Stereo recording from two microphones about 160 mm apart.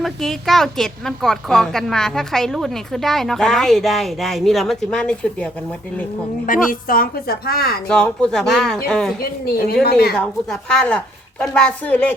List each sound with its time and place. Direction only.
0.0 s a woman's voice: centre (ahead or behind)
6.4 s a woman's voice: 60° left (ahead or behind); by 7.8 s 75° left (ahead or behind)
7.9 s a woman's voice: 5° left (ahead or behind)
10.2 s a woman's voice: 5° left (ahead or behind)